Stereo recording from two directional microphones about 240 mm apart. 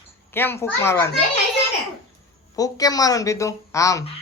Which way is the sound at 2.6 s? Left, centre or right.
Centre.